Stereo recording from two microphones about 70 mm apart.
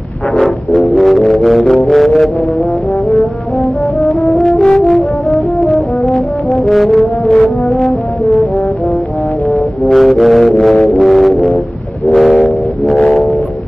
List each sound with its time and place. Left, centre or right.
0.4 s music: centre
4.0 s french horn: centre
5.7 s brass instrument: centre
9.5 s music: centre
12.1 s vehicle: centre